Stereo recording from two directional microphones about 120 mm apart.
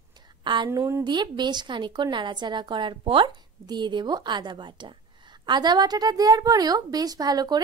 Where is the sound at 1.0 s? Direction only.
40° right (ahead or behind).